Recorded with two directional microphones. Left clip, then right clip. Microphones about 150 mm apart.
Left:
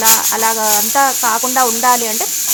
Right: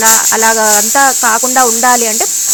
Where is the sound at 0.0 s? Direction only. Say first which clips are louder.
Right 5 dB; 30° right (ahead or behind).